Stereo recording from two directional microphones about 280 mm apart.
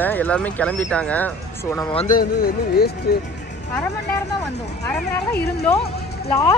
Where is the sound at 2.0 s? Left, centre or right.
Left.